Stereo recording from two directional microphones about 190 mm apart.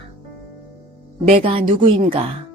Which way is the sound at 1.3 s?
30° right (ahead or behind).